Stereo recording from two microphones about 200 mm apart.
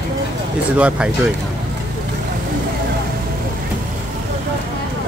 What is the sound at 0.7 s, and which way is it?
Speech, 5° right (ahead or behind).